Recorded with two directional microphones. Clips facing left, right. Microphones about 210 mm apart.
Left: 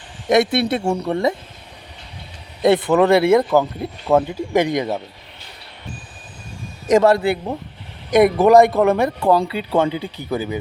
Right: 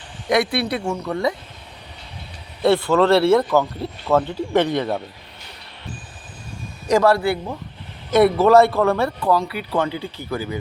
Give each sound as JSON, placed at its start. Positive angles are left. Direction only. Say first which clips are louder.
{"t": 0.3, "sound": "speech", "louder": "left 4 dB", "side_deg": 25}
{"t": 2.6, "sound": "speech", "louder": "left 2 dB", "side_deg": 20}
{"t": 6.8, "sound": "speech", "louder": "left 2 dB", "side_deg": 20}